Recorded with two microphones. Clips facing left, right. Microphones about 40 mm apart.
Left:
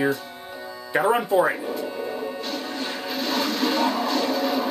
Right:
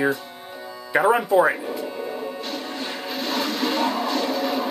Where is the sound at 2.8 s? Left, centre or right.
Centre.